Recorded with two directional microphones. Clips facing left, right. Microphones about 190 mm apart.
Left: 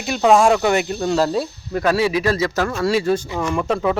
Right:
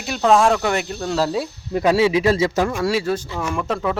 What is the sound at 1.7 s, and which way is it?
Speech, 20° right (ahead or behind).